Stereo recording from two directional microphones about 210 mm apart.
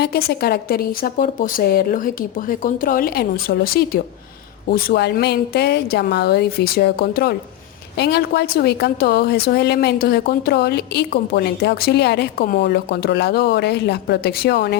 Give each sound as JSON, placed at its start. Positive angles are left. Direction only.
{"t": 0.0, "sound": "a woman's voice", "side_deg": 50}